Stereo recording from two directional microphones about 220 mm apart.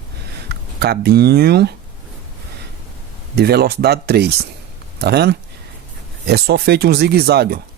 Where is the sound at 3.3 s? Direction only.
45° right (ahead or behind).